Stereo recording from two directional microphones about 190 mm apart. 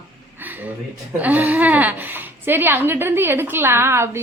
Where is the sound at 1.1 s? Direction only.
10° right (ahead or behind).